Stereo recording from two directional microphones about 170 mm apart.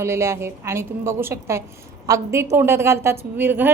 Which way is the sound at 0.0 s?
15° right (ahead or behind).